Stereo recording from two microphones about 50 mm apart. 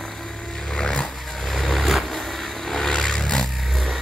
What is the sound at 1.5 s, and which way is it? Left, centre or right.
Vehicle, centre.